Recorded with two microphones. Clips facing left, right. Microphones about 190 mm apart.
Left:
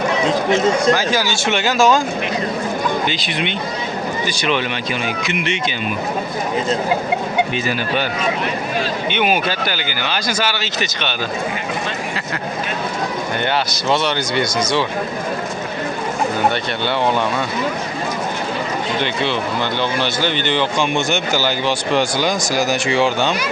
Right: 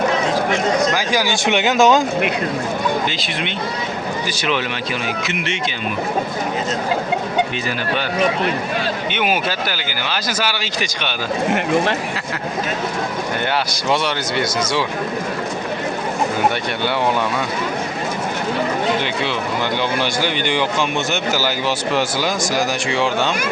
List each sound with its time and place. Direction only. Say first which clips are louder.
0.9 s speech: even; 15° right (ahead or behind)
3.1 s speech: left 2 dB; centre (ahead or behind)
9.1 s speech: left 3 dB; 5° right (ahead or behind)
13.7 s speech: left 1 dB; 10° right (ahead or behind)
20.0 s speech: even; 10° right (ahead or behind)